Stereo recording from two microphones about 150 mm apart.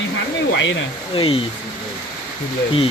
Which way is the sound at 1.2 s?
35° left (ahead or behind).